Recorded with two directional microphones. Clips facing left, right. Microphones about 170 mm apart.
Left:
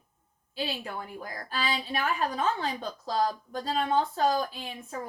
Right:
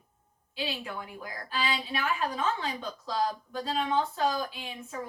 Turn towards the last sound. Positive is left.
turn(degrees=40)  # may be behind; listen again after turning